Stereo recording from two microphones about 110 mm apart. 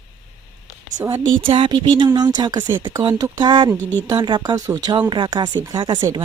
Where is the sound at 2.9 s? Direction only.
30° right (ahead or behind).